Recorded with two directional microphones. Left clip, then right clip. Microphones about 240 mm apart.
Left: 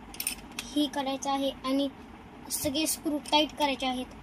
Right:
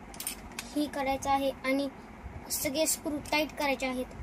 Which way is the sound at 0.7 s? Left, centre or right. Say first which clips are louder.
Left 1 dB; centre.